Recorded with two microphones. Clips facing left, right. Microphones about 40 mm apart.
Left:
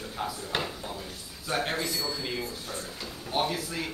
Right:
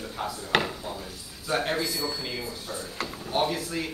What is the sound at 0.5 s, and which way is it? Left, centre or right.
Speech, right.